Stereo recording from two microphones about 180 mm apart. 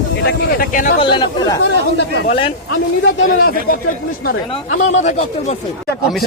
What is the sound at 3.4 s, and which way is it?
Speech, 55° left (ahead or behind).